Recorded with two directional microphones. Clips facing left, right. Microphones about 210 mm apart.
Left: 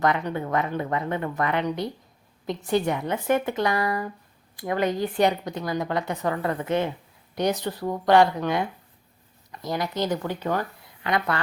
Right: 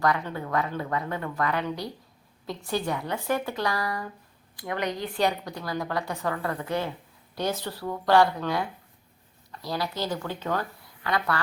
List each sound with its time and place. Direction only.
0.0 s a woman's voice: 20° left (ahead or behind)